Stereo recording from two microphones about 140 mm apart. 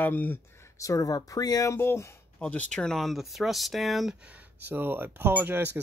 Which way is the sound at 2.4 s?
10° left (ahead or behind).